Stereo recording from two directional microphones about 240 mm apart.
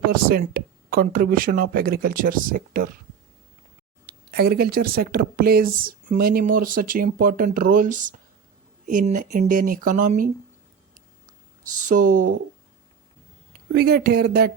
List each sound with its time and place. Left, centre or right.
0.1 s speech: right
4.3 s speech: right
11.7 s speech: right
13.7 s speech: right